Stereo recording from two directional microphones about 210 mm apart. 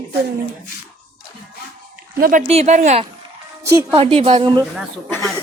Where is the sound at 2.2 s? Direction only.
40° right (ahead or behind); by 4.6 s 20° right (ahead or behind).